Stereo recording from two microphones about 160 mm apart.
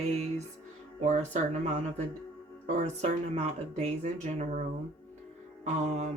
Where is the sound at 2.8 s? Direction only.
45° right (ahead or behind).